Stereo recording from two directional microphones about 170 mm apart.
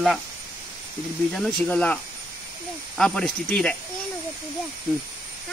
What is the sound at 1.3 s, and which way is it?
Speech, 5° left (ahead or behind).